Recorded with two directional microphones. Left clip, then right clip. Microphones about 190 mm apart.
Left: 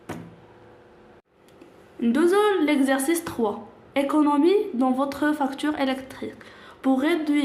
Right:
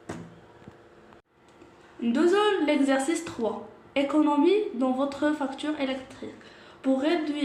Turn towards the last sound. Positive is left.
turn(degrees=45)  # may be behind; listen again after turning